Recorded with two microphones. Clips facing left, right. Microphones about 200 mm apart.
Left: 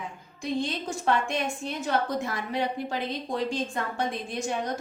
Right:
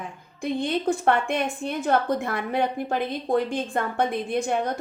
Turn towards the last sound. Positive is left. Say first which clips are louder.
# right 6 dB
turn(degrees=-55)  # may be behind; listen again after turning